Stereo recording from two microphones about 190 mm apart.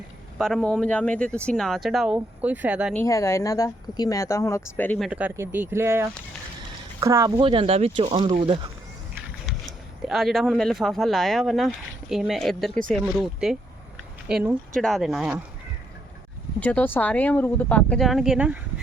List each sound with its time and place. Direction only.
0.3 s speech: centre (ahead or behind)
2.9 s speech: 15° left (ahead or behind)
5.0 s speech: 10° right (ahead or behind); by 8.4 s 30° right (ahead or behind)
9.5 s speech: centre (ahead or behind)
16.6 s speech: 10° left (ahead or behind)